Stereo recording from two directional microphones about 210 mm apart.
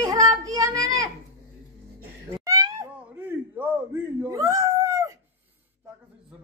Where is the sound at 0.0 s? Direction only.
15° right (ahead or behind).